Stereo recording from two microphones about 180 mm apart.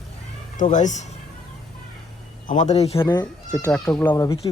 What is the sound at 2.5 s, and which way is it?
Speech, 40° left (ahead or behind).